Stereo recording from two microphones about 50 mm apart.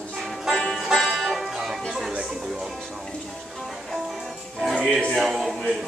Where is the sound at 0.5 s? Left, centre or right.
Centre.